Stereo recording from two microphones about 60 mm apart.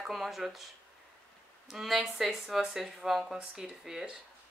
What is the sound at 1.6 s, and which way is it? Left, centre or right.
Speech, centre.